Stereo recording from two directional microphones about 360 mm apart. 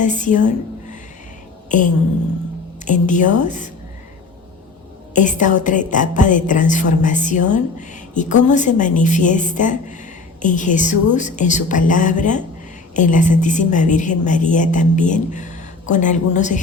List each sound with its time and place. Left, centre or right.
0.0 s a woman's voice: left
2.8 s a woman's voice: left
5.1 s a woman's voice: left